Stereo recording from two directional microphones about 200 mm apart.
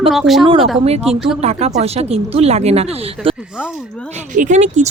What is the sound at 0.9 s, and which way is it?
Speech, 30° right (ahead or behind).